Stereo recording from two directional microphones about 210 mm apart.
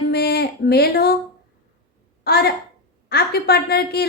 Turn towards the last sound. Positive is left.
turn(degrees=50)  # may be behind; listen again after turning